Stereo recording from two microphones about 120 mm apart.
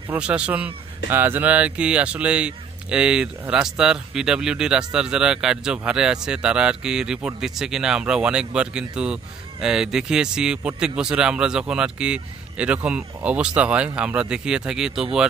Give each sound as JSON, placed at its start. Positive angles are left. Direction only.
{"t": 0.1, "sound": "speech", "side_deg": -10}